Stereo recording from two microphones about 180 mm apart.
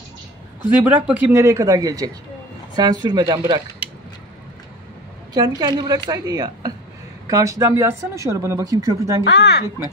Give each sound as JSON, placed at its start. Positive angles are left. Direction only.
{"t": 0.8, "sound": "a woman's voice", "side_deg": -10}
{"t": 5.3, "sound": "a woman's voice", "side_deg": -20}
{"t": 9.2, "sound": "speech", "side_deg": 75}